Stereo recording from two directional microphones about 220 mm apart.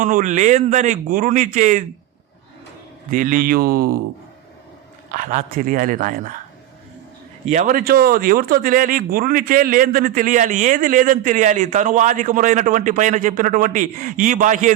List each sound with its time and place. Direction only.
0.0 s speech: 35° right (ahead or behind)
3.1 s speech: 40° right (ahead or behind)
5.1 s speech: 35° right (ahead or behind)
7.4 s speech: 35° right (ahead or behind)